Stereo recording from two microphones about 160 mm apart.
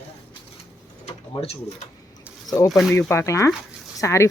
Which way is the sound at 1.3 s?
40° left (ahead or behind).